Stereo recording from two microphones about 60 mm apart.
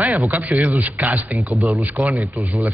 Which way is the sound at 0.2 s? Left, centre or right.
Right.